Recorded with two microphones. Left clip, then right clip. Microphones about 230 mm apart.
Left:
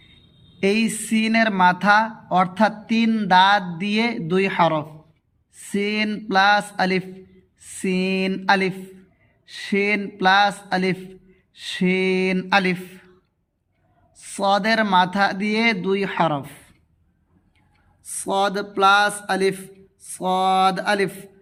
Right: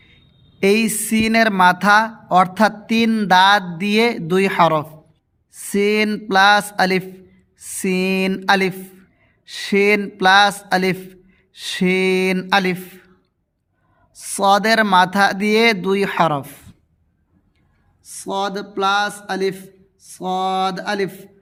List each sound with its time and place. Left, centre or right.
0.6 s speech: right
14.1 s speech: right
18.0 s a sound: centre